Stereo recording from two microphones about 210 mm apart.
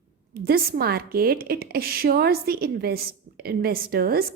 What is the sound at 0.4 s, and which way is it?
A woman's voice, 45° right (ahead or behind).